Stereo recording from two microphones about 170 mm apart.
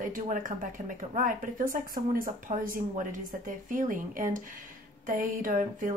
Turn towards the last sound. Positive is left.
turn(degrees=-50)  # may be behind; listen again after turning